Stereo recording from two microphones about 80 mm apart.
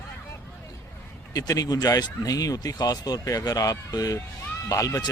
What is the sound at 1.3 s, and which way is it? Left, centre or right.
Speech, left.